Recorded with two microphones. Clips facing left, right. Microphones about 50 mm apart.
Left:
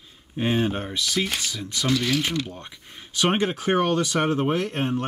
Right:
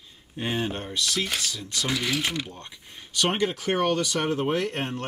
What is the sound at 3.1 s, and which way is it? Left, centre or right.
Speech, left.